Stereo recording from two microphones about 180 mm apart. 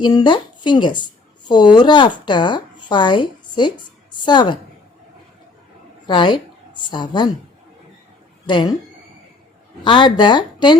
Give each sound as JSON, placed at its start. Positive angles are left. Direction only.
{"t": 0.0, "sound": "a woman's voice", "side_deg": 25}
{"t": 6.1, "sound": "a woman's voice", "side_deg": 25}
{"t": 8.4, "sound": "a woman's voice", "side_deg": 25}
{"t": 9.8, "sound": "a woman's voice", "side_deg": 25}